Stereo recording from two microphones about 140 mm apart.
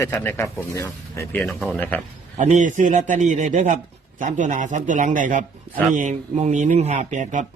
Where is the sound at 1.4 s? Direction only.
Centre (ahead or behind).